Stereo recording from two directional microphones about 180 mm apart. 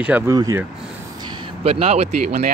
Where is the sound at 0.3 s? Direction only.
20° right (ahead or behind).